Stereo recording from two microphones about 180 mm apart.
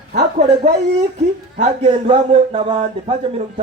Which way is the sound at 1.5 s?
35° right (ahead or behind).